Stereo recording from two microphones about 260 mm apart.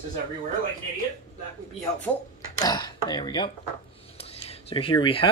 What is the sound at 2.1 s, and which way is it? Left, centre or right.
Speech, centre.